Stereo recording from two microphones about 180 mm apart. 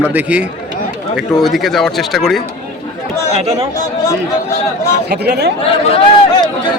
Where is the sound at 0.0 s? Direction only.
10° right (ahead or behind).